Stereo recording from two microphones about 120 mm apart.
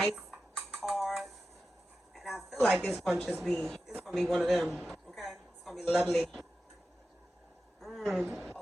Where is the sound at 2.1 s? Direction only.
Centre (ahead or behind).